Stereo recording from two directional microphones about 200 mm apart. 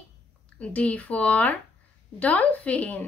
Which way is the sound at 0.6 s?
5° left (ahead or behind).